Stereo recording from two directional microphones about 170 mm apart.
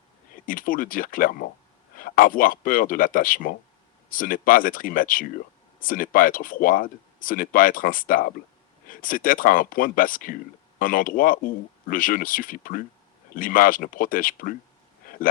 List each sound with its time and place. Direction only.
0.4 s speech: 55° left (ahead or behind)